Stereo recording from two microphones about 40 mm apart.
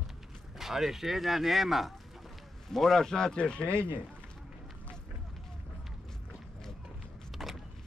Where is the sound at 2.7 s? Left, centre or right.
Centre.